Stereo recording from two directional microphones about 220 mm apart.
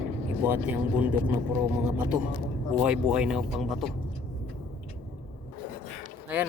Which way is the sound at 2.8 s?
5° right (ahead or behind).